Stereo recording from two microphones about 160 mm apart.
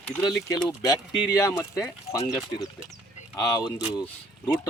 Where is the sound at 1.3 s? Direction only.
20° left (ahead or behind).